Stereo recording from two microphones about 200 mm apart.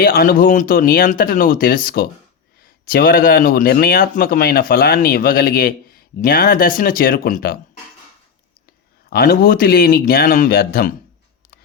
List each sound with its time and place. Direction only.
0.0 s speech: 45° left (ahead or behind)
9.0 s speech: 50° left (ahead or behind)